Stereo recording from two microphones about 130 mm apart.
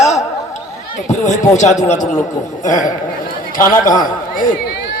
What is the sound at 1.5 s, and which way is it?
A man's voice, 65° left (ahead or behind).